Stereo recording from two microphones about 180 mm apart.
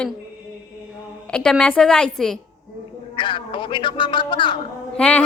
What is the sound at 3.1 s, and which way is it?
A man's voice, 25° left (ahead or behind).